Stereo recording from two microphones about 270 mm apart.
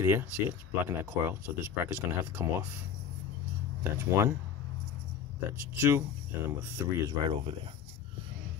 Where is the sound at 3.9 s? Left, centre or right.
Centre.